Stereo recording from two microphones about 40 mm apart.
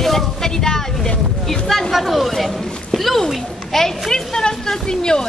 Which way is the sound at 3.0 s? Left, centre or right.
Centre.